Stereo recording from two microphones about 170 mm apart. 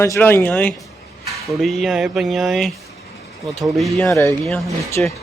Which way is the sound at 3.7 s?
Centre (ahead or behind).